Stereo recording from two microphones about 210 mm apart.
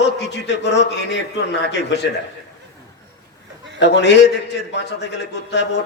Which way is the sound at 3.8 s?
55° left (ahead or behind).